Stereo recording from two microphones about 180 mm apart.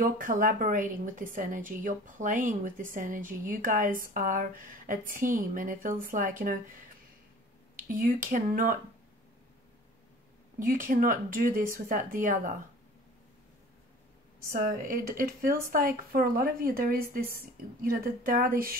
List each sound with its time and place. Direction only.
0.0 s a woman's voice: 50° right (ahead or behind)
7.9 s a woman's voice: 50° right (ahead or behind)
10.6 s a woman's voice: 50° right (ahead or behind)
14.5 s a woman's voice: 50° right (ahead or behind)